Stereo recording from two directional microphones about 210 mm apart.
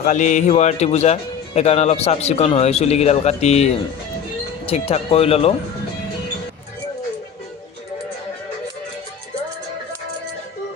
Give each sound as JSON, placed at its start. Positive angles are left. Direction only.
{"t": 0.0, "sound": "speech", "side_deg": 35}